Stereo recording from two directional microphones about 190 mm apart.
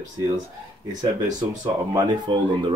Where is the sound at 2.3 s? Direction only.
25° right (ahead or behind).